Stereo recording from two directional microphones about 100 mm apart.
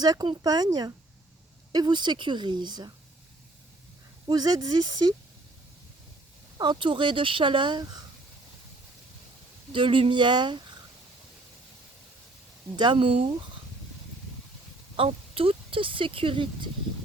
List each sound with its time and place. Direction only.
0.0 s speech: 45° right (ahead or behind)
4.3 s speech: 40° right (ahead or behind)
6.6 s speech: 50° right (ahead or behind)
9.7 s speech: 55° right (ahead or behind)
12.7 s speech: 50° right (ahead or behind)
14.9 s speech: 65° right (ahead or behind)